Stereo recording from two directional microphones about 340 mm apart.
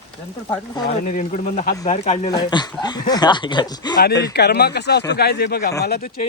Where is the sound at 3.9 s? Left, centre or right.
Left.